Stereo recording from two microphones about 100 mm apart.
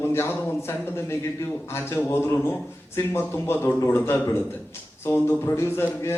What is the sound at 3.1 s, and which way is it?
A man's voice, 25° left (ahead or behind).